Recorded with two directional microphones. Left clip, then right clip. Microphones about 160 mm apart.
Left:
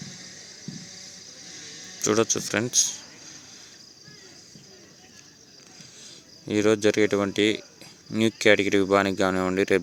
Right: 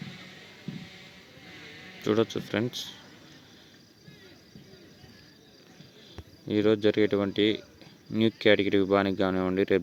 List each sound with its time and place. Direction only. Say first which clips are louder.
0.0 s a sound: left 3 dB; 30° left (ahead or behind)
2.0 s speech: left 4 dB; 5° left (ahead or behind)
6.5 s speech: left 3 dB; 5° left (ahead or behind)